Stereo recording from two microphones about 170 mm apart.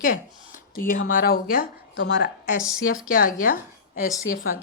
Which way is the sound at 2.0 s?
90° left.